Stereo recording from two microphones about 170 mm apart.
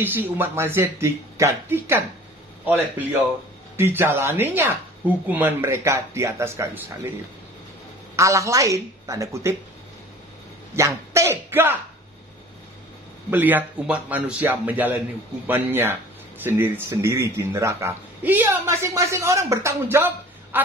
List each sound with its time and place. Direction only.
0.0 s speech: 10° right (ahead or behind)
8.2 s speech: 20° right (ahead or behind)
10.8 s speech: 15° right (ahead or behind)
13.3 s speech: 10° right (ahead or behind)
20.5 s quack: 10° right (ahead or behind)